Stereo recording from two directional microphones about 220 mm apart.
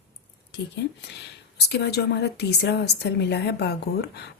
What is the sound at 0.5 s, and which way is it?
Speech, 50° left (ahead or behind).